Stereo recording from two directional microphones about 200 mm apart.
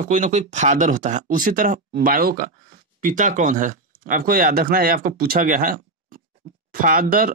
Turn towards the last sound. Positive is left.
turn(degrees=-45)  # may be behind; listen again after turning